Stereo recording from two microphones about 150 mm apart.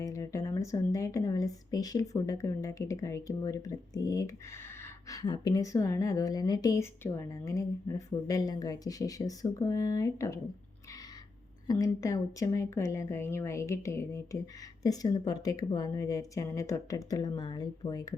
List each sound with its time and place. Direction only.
0.0 s a woman's voice: 20° left (ahead or behind)
11.7 s a woman's voice: 20° left (ahead or behind)